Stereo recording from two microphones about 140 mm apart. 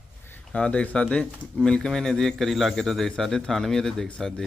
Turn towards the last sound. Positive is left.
turn(degrees=5)  # may be behind; listen again after turning